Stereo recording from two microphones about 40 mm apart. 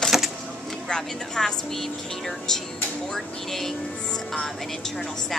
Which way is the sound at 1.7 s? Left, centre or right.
Centre.